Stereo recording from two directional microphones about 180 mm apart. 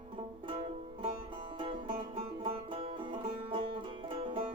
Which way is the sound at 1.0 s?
30° right (ahead or behind).